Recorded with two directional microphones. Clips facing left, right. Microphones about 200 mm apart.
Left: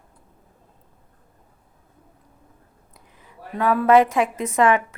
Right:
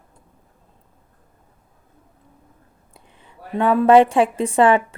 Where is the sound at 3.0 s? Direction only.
30° right (ahead or behind).